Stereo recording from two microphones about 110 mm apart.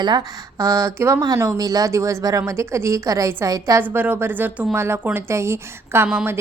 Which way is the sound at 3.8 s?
15° right (ahead or behind).